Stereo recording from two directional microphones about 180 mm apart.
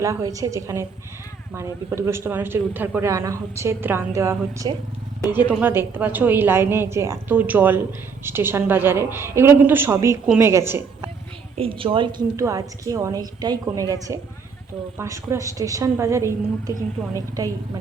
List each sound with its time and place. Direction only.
0.0 s a man's voice: 20° right (ahead or behind)
11.5 s a woman's voice: 30° right (ahead or behind)